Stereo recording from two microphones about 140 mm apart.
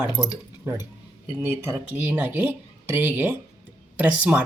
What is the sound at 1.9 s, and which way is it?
Speech, 10° right (ahead or behind).